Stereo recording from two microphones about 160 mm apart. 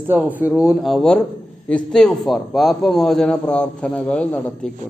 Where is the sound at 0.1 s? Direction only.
10° right (ahead or behind).